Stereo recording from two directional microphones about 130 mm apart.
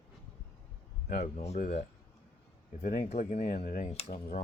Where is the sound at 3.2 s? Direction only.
80° left.